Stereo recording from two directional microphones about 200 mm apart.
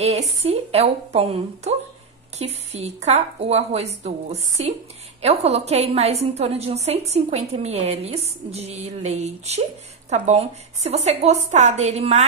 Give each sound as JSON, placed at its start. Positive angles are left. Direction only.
{"t": 0.4, "sound": "a woman's voice", "side_deg": -30}